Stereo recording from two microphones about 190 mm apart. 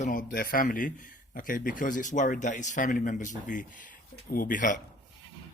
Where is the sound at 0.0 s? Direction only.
45° left (ahead or behind).